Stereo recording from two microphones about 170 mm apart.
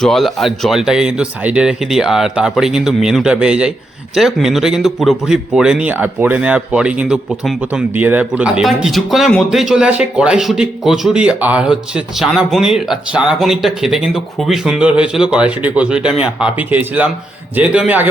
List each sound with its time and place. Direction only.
0.0 s a man's voice: centre (ahead or behind)